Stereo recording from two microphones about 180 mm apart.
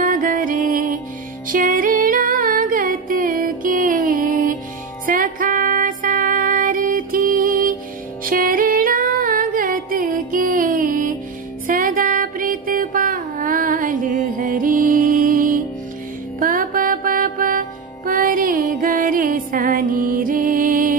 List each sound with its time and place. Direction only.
0.0 s music: 50° right (ahead or behind)